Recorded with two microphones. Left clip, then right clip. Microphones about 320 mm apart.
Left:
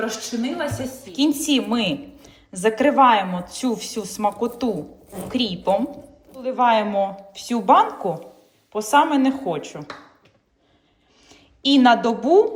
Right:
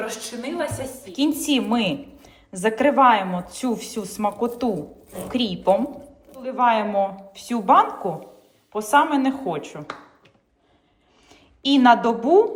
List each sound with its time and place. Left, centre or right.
1.0 s a woman's voice: centre
11.3 s a woman's voice: centre